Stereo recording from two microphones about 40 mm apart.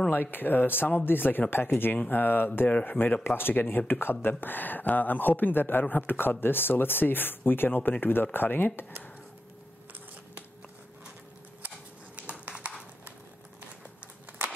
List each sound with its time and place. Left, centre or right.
0.1 s speech: left
2.0 s speech: left
2.7 s a man's voice: left
3.3 s speech: left
12.3 s a sound: right